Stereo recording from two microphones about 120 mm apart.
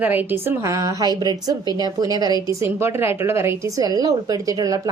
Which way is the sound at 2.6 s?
20° right (ahead or behind).